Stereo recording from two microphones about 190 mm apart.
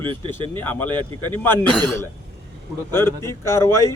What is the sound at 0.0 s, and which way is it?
Speech, 25° right (ahead or behind).